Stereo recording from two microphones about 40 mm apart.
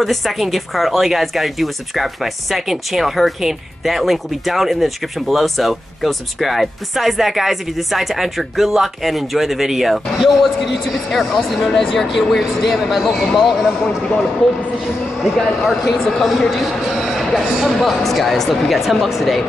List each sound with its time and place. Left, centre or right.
0.0 s speech: centre
13.8 s speech: centre
15.6 s speech: centre
16.0 s speech: centre
16.3 s speech: centre
16.6 s a sound: centre
17.1 s a sound: centre
17.6 s speech: centre